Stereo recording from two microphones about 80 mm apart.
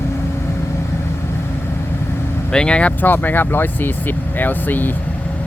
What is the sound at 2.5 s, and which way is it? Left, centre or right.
Speech, centre.